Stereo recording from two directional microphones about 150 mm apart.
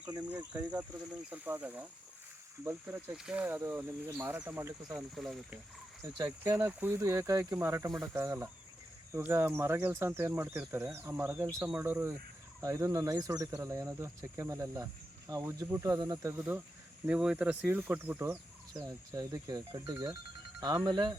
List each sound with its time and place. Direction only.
0.2 s speech: 10° right (ahead or behind)
4.9 s speech: centre (ahead or behind)
6.2 s speech: 15° right (ahead or behind)
16.3 s speech: 10° right (ahead or behind)
18.7 s speech: 30° right (ahead or behind)